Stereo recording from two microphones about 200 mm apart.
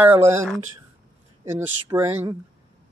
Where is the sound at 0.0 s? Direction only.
10° right (ahead or behind).